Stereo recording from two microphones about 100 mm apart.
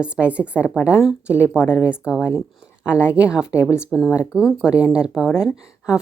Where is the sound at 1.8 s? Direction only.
10° right (ahead or behind).